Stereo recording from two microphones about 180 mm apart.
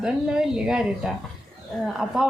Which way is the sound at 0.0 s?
5° right (ahead or behind).